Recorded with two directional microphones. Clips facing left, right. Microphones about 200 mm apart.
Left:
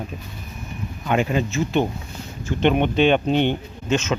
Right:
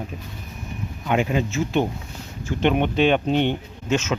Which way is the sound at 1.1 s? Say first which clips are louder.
Left 1 dB; 10° right (ahead or behind).